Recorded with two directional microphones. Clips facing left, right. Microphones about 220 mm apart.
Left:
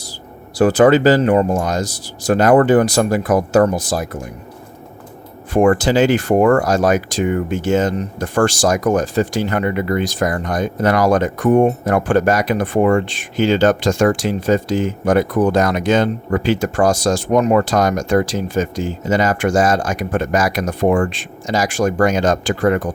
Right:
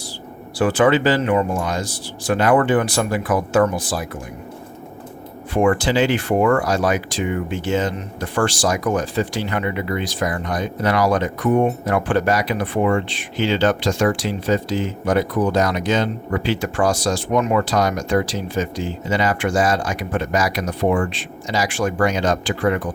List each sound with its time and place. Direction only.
0.6 s speech: 40° left (ahead or behind)
5.5 s speech: 45° left (ahead or behind)